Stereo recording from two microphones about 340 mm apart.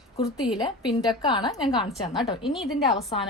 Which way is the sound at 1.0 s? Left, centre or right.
Centre.